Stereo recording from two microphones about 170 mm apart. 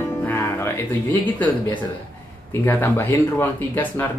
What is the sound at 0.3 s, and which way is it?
Music, 10° left (ahead or behind).